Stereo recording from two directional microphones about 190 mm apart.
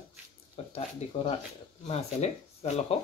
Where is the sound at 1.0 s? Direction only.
35° left (ahead or behind).